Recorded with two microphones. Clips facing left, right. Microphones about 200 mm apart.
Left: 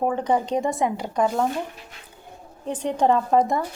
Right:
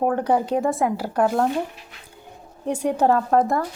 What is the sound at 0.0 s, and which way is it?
Speech, 10° right (ahead or behind).